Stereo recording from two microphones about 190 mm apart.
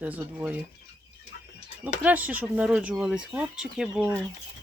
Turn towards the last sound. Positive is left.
turn(degrees=0)  # may be behind; listen again after turning